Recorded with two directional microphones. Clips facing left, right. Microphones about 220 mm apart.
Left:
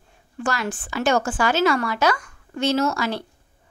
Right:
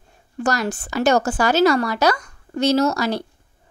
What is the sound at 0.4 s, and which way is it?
A woman's voice, 40° right (ahead or behind).